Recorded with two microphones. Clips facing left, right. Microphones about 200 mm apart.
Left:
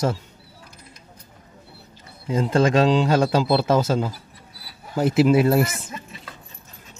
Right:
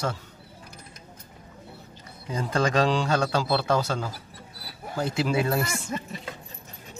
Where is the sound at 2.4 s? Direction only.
25° left (ahead or behind).